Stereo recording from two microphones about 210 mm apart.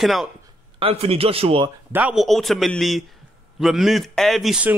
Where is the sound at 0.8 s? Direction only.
25° right (ahead or behind).